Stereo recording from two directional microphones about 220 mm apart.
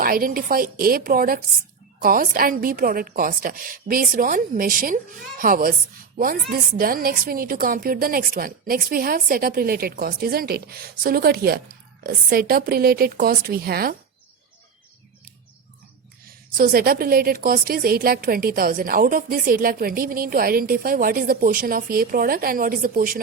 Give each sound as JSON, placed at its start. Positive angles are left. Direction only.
{"t": 0.0, "sound": "a woman's voice", "side_deg": -40}
{"t": 16.2, "sound": "a woman's voice", "side_deg": -40}